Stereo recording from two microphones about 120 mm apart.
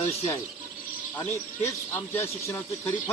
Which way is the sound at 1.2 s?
20° left (ahead or behind).